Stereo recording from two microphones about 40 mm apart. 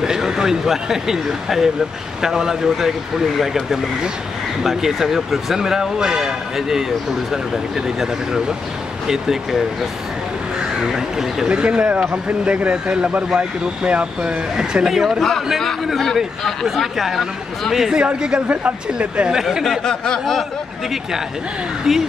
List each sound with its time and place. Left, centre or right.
0.0 s speech: centre
10.6 s speech: centre
11.4 s speech: right
12.8 s speech: right
14.9 s speech: centre
15.1 s speech: centre
16.6 s speech: centre
17.9 s speech: right
19.3 s speech: centre
19.8 s speech: centre
21.9 s speech: centre